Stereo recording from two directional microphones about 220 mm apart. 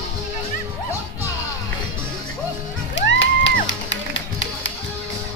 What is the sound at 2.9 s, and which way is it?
Music, 55° left (ahead or behind).